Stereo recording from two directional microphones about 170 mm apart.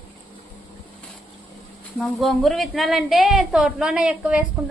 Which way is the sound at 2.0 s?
Centre (ahead or behind).